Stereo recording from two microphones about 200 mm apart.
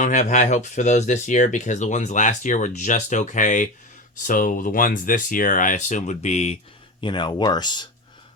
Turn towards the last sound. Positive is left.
turn(degrees=20)  # may be behind; listen again after turning